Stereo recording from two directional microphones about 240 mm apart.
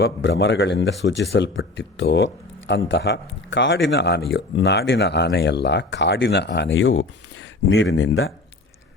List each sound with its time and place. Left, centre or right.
0.0 s speech: left